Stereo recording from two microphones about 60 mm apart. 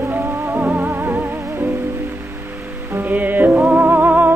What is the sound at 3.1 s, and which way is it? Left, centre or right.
Music, right.